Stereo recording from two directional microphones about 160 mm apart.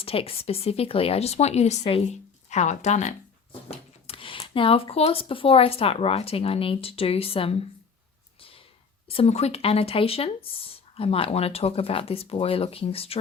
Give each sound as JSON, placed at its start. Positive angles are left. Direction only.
{"t": 0.0, "sound": "speech", "side_deg": 35}
{"t": 9.0, "sound": "speech", "side_deg": 40}